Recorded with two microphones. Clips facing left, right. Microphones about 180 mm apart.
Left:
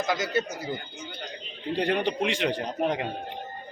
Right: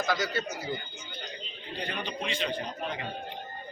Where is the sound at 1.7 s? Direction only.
75° left (ahead or behind).